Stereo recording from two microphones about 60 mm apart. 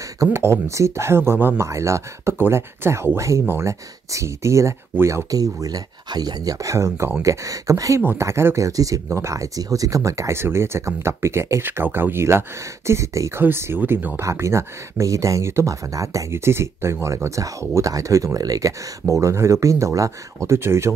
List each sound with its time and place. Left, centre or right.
0.3 s speech: right
1.6 s speech: right
3.2 s speech: right
3.4 s speech: right
4.1 s speech: right
5.3 s speech: right
8.2 s speech: right
8.5 s speech: right
9.1 s speech: right
11.6 s speech: right
13.4 s speech: right
14.3 s speech: right
16.3 s speech: right